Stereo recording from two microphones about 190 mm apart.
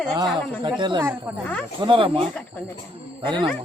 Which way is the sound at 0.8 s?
25° right (ahead or behind).